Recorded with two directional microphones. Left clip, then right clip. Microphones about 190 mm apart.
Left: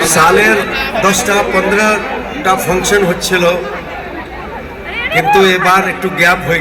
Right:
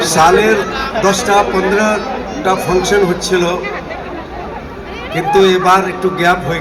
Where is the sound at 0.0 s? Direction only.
55° right (ahead or behind).